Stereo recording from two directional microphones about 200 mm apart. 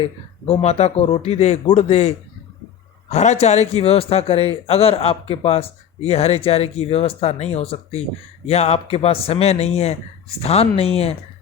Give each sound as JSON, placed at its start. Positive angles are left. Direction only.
{"t": 0.0, "sound": "speech", "side_deg": 30}